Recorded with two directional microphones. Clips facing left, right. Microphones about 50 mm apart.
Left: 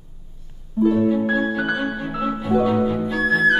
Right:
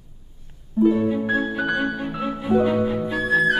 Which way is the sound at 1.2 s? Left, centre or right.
Centre.